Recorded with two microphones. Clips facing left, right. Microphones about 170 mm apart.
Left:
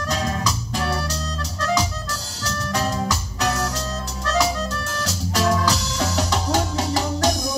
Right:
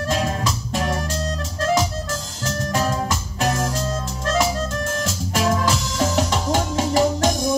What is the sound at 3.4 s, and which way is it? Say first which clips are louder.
Music: right 2 dB; 35° right (ahead or behind).